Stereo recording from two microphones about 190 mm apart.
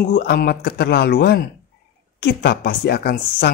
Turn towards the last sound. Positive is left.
turn(degrees=60)  # may be behind; listen again after turning